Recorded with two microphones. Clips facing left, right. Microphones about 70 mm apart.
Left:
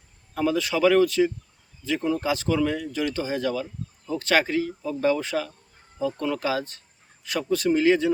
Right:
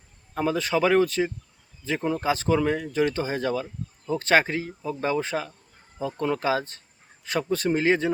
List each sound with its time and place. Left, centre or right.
0.3 s speech: right